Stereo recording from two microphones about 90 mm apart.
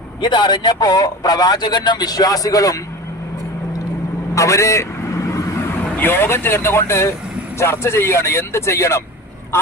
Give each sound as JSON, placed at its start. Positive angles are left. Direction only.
{"t": 0.2, "sound": "a man's voice", "side_deg": 55}
{"t": 4.4, "sound": "speech", "side_deg": 35}
{"t": 6.0, "sound": "speech", "side_deg": 25}